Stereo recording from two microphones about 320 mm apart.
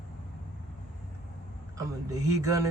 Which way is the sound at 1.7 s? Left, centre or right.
Centre.